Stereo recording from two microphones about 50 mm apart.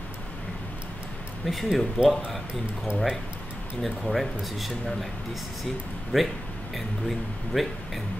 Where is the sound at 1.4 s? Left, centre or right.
Centre.